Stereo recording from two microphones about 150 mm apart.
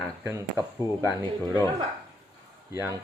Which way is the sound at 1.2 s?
25° left (ahead or behind).